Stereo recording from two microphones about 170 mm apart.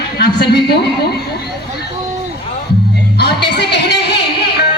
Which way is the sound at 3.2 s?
80° left.